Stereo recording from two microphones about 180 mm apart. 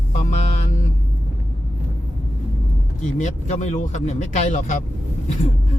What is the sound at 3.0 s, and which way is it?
Speech, 40° left (ahead or behind).